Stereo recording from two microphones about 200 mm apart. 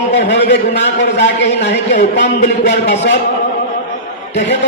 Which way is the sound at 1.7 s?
35° left (ahead or behind).